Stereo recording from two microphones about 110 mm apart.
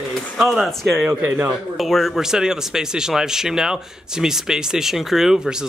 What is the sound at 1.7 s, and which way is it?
Speech, centre (ahead or behind).